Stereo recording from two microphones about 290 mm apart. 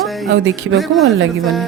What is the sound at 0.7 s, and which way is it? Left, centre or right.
Speech, centre.